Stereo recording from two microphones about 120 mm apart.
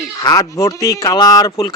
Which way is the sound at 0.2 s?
30° left (ahead or behind).